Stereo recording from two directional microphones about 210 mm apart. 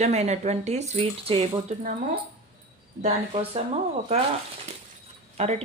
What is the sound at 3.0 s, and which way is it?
Speech, 30° right (ahead or behind).